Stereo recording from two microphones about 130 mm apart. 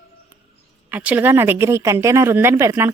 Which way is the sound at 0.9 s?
15° right (ahead or behind).